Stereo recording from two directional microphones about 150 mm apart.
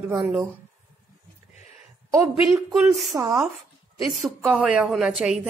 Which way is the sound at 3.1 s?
25° right (ahead or behind).